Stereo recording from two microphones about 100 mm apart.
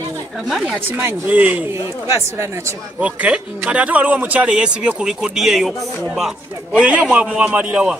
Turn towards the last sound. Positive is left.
turn(degrees=-10)  # may be behind; listen again after turning